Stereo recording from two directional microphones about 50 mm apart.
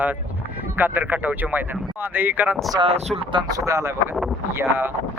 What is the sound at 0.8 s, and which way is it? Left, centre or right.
Speech, right.